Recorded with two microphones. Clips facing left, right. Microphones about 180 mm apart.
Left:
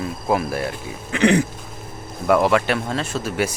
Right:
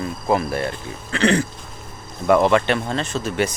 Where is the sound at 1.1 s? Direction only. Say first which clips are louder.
Left 2 dB; 15° left (ahead or behind).